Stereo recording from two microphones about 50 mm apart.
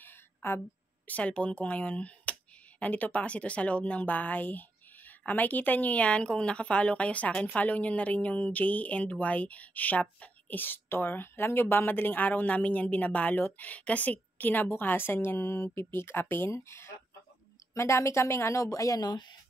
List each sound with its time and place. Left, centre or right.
0.0 s a sound: left
1.0 s speech: left
10.6 s a woman's voice: left
16.5 s speech: left
17.7 s a woman's voice: left